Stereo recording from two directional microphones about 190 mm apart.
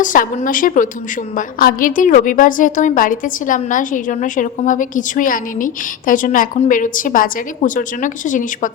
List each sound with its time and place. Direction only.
0.0 s a woman's voice: 45° left (ahead or behind)